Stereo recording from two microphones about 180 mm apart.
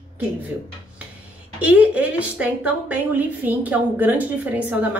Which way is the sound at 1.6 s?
10° right (ahead or behind).